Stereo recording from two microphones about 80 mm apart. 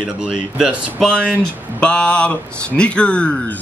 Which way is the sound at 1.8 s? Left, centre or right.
Centre.